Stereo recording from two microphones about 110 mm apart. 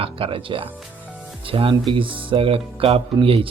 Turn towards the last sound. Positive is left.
turn(degrees=-55)  # may be behind; listen again after turning